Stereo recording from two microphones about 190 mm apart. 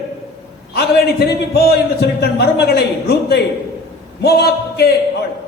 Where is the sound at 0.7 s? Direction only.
60° left (ahead or behind).